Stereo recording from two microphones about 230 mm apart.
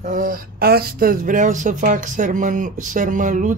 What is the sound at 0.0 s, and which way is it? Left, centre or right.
Speech, right.